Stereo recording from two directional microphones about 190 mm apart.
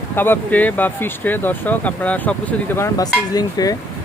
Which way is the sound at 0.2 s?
10° left (ahead or behind).